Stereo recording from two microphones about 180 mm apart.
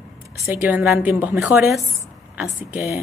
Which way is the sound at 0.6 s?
10° right (ahead or behind).